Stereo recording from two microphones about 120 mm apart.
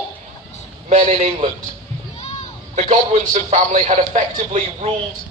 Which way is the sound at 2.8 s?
70° right (ahead or behind).